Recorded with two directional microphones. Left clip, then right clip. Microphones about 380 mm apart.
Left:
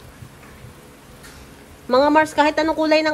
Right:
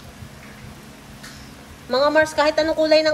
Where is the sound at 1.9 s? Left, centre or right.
Centre.